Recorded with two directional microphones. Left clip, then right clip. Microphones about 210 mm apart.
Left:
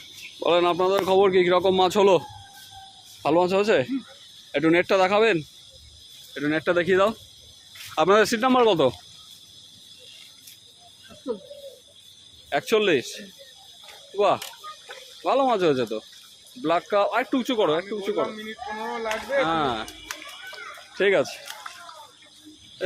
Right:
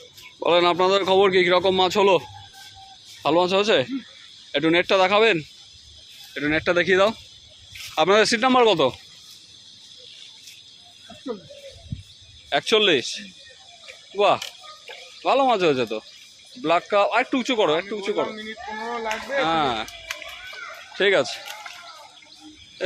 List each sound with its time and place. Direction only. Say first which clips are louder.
0.3 s speech: right 2 dB; centre (ahead or behind); by 2.2 s 15° left (ahead or behind)
3.2 s speech: right 1 dB; 5° left (ahead or behind)
12.5 s speech: right 3 dB; centre (ahead or behind)
15.2 s speech: right 2 dB; 5° right (ahead or behind)
18.3 s speech: right 1 dB; 45° right (ahead or behind)
19.4 s speech: right 2 dB; centre (ahead or behind)